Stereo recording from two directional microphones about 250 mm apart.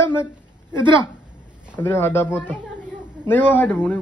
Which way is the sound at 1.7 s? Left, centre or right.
Centre.